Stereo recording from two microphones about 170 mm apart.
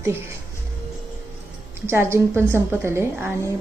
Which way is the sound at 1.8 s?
15° right (ahead or behind).